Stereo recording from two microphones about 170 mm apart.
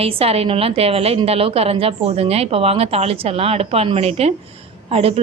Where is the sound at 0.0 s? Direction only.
35° right (ahead or behind).